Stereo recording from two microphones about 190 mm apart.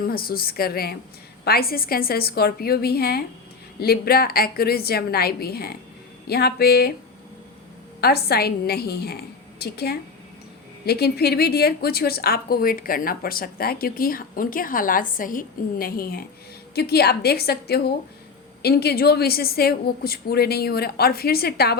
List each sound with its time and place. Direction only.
0.0 s a woman's voice: 50° left (ahead or behind)
8.0 s a woman's voice: 55° left (ahead or behind)